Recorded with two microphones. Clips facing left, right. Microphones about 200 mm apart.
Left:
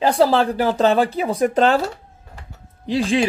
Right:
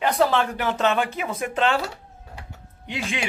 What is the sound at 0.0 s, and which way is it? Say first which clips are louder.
Speech: left 5 dB; 30° left (ahead or behind).